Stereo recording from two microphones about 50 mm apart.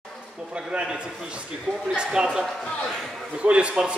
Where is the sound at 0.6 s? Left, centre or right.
Centre.